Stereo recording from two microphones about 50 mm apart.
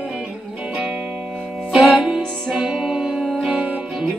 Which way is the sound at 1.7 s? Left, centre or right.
Centre.